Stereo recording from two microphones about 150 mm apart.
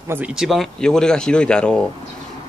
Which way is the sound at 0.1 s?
10° right (ahead or behind).